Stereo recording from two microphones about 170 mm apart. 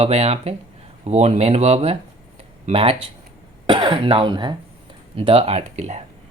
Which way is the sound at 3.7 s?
30° right (ahead or behind).